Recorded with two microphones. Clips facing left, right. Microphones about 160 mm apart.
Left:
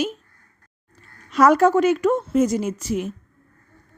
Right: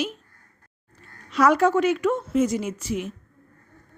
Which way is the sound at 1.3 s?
45° left (ahead or behind).